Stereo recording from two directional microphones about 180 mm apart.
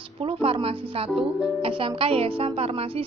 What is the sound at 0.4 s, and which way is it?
A woman's voice, 30° right (ahead or behind).